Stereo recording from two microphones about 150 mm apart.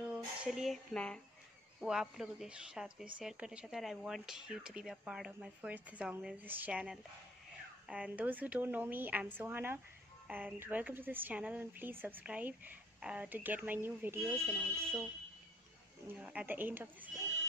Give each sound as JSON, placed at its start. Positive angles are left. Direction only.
{"t": 0.0, "sound": "music", "side_deg": -5}
{"t": 1.8, "sound": "speech", "side_deg": -5}
{"t": 16.2, "sound": "speech", "side_deg": -10}